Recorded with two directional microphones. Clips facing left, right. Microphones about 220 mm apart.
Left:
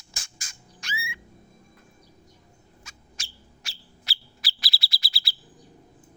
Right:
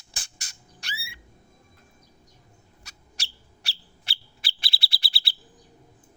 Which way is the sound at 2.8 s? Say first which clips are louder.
Right 1 dB; 35° right (ahead or behind).